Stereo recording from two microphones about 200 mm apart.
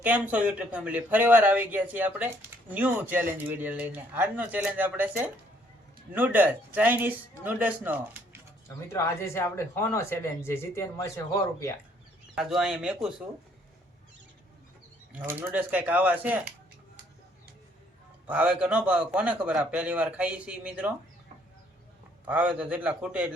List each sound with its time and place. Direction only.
0.0 s speech: 5° right (ahead or behind)
8.6 s speech: 15° left (ahead or behind)
12.4 s a man's voice: centre (ahead or behind)
15.2 s speech: 10° right (ahead or behind)
18.3 s speech: 5° right (ahead or behind)
22.3 s a man's voice: 5° right (ahead or behind)